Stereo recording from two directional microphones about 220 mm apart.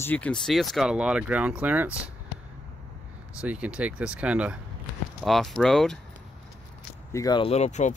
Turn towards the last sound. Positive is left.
turn(degrees=30)  # may be behind; listen again after turning